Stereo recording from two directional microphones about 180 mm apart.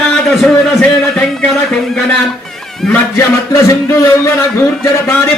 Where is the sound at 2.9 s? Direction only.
15° left (ahead or behind).